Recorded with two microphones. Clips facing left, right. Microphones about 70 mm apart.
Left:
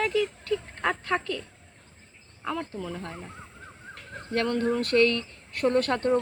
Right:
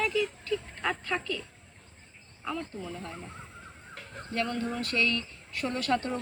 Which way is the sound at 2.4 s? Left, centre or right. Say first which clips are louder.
Left 4 dB; left.